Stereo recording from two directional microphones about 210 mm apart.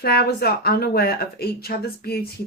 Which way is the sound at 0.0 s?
45° left (ahead or behind).